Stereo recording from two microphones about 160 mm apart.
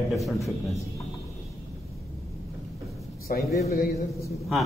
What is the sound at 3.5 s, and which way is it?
Speech, 45° left (ahead or behind).